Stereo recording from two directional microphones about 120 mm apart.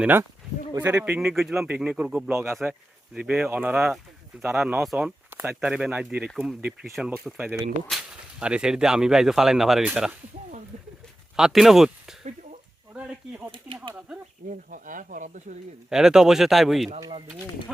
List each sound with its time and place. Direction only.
0.0 s speech: 15° right (ahead or behind)
1.2 s speech: 5° right (ahead or behind)
2.3 s speech: 20° right (ahead or behind)
3.2 s speech: 10° right (ahead or behind)
4.8 s speech: 5° right (ahead or behind)
6.6 s speech: 15° right (ahead or behind)
6.9 s speech: 5° right (ahead or behind)
11.3 s speech: 5° right (ahead or behind)
12.2 s a sound: 90° right
12.9 s speech: 10° right (ahead or behind)
14.7 s speech: 90° right
15.9 s speech: 5° right (ahead or behind)